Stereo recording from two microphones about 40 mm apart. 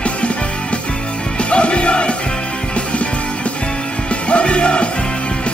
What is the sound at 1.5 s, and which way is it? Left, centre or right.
Music, left.